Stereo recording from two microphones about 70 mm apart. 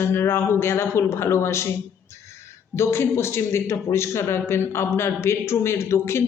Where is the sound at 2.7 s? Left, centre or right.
Left.